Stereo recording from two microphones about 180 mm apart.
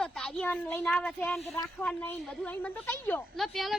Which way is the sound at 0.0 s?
5° left (ahead or behind).